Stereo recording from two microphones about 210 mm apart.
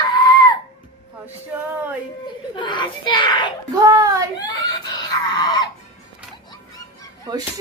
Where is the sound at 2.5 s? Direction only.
20° left (ahead or behind).